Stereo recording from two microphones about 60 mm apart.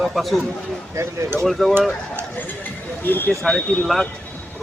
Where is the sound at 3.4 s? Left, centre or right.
Centre.